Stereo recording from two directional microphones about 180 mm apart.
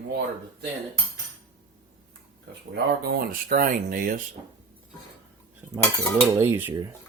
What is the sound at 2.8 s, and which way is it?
Speech, 60° right (ahead or behind).